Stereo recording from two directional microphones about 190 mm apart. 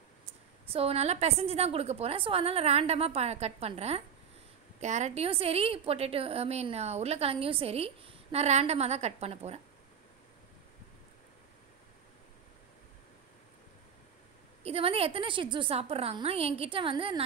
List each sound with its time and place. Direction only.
0.7 s a woman's voice: 30° right (ahead or behind)
14.6 s a woman's voice: 30° right (ahead or behind)